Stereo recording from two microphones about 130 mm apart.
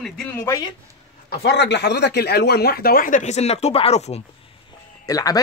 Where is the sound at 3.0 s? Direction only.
75° left (ahead or behind); by 4.2 s 55° left (ahead or behind).